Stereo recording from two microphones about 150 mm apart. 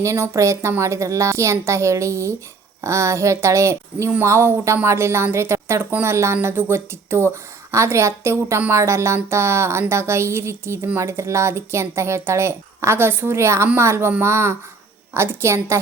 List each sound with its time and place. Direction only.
0.0 s a woman's voice: 20° right (ahead or behind)